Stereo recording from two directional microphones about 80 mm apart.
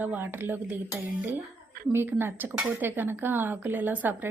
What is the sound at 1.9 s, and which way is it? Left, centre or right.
A woman's voice, right.